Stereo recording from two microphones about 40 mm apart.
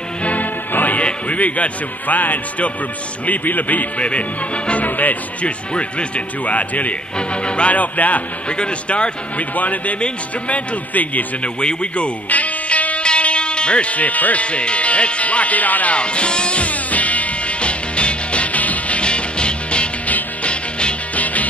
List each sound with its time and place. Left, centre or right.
0.2 s music: left
1.0 s a man's voice: left
4.0 s speech: left
5.4 s speech: left
7.2 s speech: left
7.7 s speech: left
8.5 s speech: left
11.4 s speech: left
12.3 s music: left
14.4 s speech: left
16.0 s music: left
18.9 s music: left
21.1 s music: left